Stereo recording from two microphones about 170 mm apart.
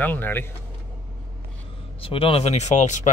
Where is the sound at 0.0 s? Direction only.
10° left (ahead or behind).